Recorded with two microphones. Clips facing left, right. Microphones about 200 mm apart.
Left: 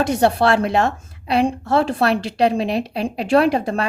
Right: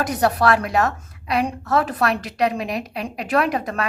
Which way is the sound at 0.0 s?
25° left (ahead or behind).